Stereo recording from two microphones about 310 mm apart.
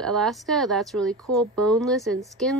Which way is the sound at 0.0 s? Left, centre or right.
Centre.